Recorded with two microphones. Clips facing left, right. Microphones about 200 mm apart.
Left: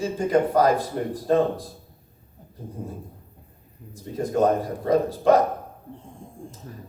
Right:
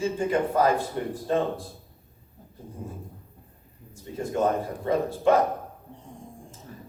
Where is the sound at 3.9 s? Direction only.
40° left (ahead or behind).